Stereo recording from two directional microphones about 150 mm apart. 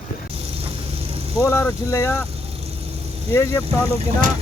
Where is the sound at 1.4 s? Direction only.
20° left (ahead or behind).